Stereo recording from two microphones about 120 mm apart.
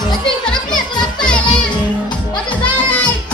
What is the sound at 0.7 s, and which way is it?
Music, 35° left (ahead or behind).